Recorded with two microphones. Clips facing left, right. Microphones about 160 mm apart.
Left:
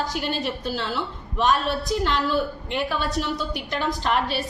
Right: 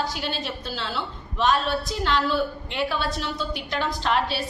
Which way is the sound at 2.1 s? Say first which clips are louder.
Right 3 dB; 45° left (ahead or behind).